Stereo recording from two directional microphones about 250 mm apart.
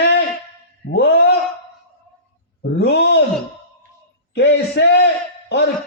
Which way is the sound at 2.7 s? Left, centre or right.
Left.